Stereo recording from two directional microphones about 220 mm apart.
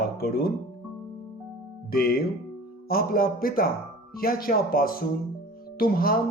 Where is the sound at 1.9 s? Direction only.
45° left (ahead or behind).